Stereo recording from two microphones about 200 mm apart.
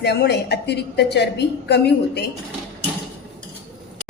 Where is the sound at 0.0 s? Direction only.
55° left (ahead or behind).